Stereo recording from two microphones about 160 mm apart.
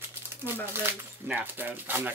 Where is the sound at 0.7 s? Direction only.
15° right (ahead or behind).